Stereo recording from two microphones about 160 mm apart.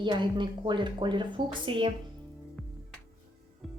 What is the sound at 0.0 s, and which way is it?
A woman's voice, 30° right (ahead or behind).